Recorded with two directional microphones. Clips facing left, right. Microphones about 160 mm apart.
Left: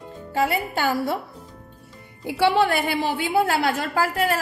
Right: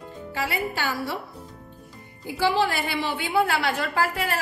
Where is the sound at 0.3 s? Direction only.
45° left (ahead or behind).